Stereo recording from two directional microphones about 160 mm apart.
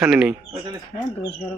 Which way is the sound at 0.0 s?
5° right (ahead or behind).